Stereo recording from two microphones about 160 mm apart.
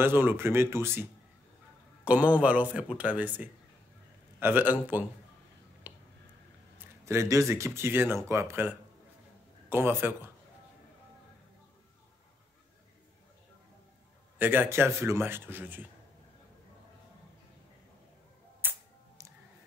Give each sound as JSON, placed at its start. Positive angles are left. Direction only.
{"t": 0.0, "sound": "speech", "side_deg": -15}
{"t": 2.0, "sound": "speech", "side_deg": -10}
{"t": 5.9, "sound": "a sound", "side_deg": -15}
{"t": 7.1, "sound": "speech", "side_deg": -20}
{"t": 14.4, "sound": "speech", "side_deg": -10}
{"t": 18.6, "sound": "music", "side_deg": -10}